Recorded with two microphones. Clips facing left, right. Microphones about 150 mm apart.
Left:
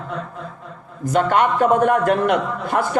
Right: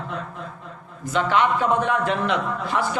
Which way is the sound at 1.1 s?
50° left (ahead or behind).